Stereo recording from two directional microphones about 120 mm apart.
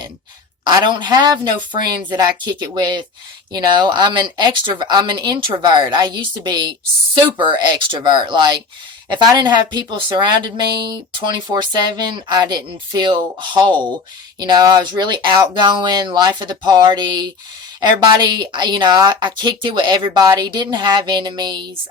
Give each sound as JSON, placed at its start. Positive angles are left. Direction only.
{"t": 0.6, "sound": "speech", "side_deg": -40}